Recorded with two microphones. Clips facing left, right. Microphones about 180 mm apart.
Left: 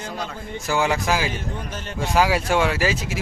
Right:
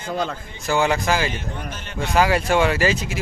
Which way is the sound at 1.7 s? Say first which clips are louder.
Left 3 dB; 40° left (ahead or behind).